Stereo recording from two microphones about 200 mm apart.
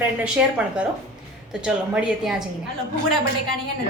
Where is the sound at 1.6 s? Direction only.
5° right (ahead or behind).